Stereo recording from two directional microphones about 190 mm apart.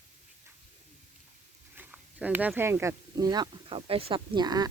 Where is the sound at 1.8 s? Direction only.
10° right (ahead or behind).